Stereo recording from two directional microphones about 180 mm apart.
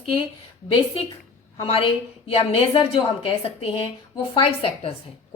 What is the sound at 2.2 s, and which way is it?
A woman's voice, 35° left (ahead or behind).